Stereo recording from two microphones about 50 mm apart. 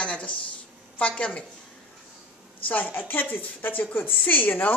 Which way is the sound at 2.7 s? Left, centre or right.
Left.